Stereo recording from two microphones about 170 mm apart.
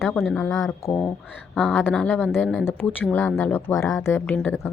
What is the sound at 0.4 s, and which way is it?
A woman's voice, 20° left (ahead or behind).